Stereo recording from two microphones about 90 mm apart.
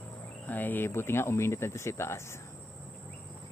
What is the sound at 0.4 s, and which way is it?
Speech, 20° left (ahead or behind).